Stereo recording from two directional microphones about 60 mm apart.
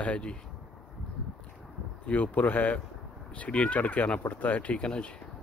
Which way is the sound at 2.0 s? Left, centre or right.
Left.